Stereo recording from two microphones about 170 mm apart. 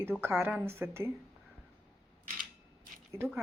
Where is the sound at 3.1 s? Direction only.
15° right (ahead or behind).